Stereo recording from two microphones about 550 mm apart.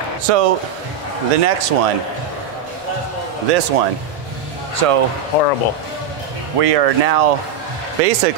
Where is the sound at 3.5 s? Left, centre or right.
Right.